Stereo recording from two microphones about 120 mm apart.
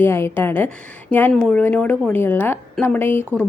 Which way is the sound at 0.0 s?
20° left (ahead or behind).